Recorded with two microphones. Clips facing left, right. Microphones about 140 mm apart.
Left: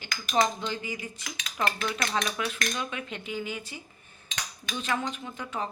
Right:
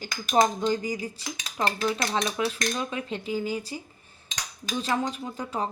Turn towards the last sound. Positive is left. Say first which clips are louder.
# right 4 dB
turn(degrees=-35)  # may be behind; listen again after turning